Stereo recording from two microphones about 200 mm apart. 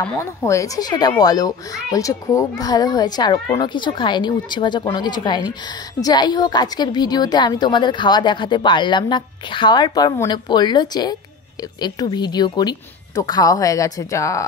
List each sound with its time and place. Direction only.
0.1 s a child's voice: 15° left (ahead or behind)